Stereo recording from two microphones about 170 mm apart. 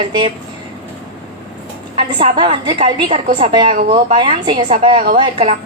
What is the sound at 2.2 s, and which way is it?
A woman's voice, 30° right (ahead or behind).